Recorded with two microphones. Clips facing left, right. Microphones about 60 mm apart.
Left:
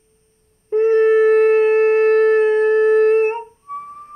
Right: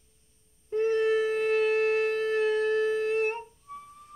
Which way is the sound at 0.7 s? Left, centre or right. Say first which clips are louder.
Left 11 dB; left.